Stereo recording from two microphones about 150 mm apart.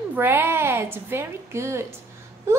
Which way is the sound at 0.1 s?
15° right (ahead or behind).